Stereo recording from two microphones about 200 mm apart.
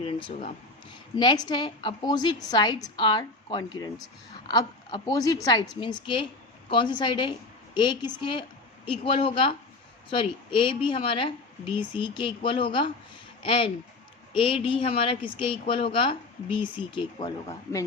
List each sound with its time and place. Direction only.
0.0 s a woman's voice: 25° left (ahead or behind)